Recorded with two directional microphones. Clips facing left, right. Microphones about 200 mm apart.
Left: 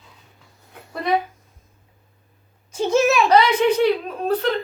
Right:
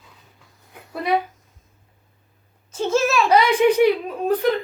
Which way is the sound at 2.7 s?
15° left (ahead or behind).